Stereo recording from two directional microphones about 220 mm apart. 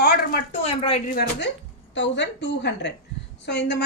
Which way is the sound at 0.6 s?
25° left (ahead or behind).